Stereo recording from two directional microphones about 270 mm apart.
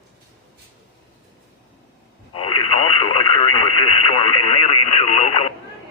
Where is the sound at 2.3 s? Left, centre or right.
Centre.